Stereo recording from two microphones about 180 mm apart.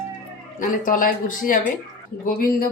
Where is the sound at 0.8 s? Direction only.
50° left (ahead or behind).